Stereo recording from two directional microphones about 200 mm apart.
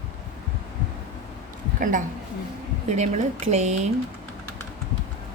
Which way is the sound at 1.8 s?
40° right (ahead or behind).